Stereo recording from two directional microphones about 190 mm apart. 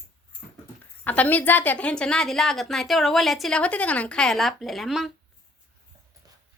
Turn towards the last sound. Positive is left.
turn(degrees=0)  # may be behind; listen again after turning